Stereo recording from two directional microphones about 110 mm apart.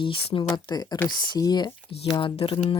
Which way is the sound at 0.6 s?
40° left (ahead or behind).